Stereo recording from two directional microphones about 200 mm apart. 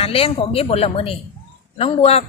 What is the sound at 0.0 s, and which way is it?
A man's voice, 30° left (ahead or behind).